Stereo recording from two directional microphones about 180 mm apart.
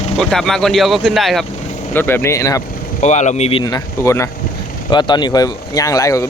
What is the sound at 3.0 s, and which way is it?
Speech, 40° left (ahead or behind).